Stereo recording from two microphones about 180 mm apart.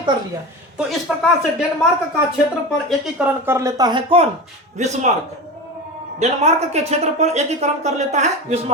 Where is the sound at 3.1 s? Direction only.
10° right (ahead or behind); by 4.2 s 30° right (ahead or behind).